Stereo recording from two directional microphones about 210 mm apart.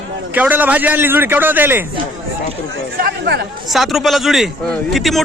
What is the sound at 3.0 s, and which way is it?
Speech, 50° right (ahead or behind).